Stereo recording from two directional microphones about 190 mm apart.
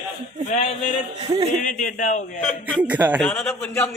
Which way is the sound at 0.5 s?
35° left (ahead or behind).